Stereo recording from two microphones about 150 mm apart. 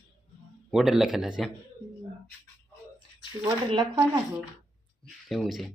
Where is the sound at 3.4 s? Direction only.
30° right (ahead or behind).